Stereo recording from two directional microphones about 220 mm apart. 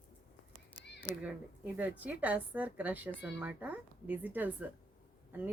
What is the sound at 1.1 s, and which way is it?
A woman's voice, 5° right (ahead or behind).